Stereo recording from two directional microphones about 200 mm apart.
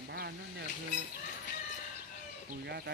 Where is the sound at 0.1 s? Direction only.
55° right (ahead or behind).